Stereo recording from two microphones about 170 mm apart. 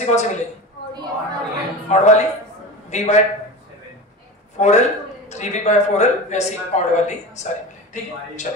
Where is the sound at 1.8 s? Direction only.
40° left (ahead or behind).